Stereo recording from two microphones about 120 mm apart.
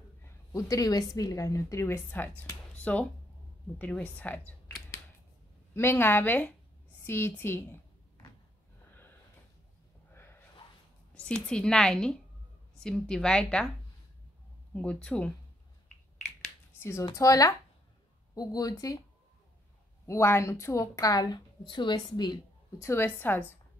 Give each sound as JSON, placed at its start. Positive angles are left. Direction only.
{"t": 0.2, "sound": "a woman's voice", "side_deg": 25}
{"t": 4.6, "sound": "finger snapping", "side_deg": 25}
{"t": 5.8, "sound": "a woman's voice", "side_deg": 20}
{"t": 11.2, "sound": "a woman's voice", "side_deg": 10}
{"t": 14.7, "sound": "a woman's voice", "side_deg": 10}
{"t": 17.0, "sound": "a woman's voice", "side_deg": 30}
{"t": 20.1, "sound": "a woman's voice", "side_deg": 20}
{"t": 22.8, "sound": "a woman's voice", "side_deg": 20}